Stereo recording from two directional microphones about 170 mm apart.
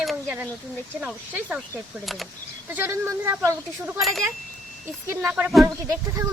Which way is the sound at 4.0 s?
Centre (ahead or behind).